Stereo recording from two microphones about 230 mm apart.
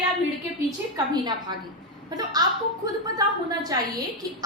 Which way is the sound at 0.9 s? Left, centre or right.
Centre.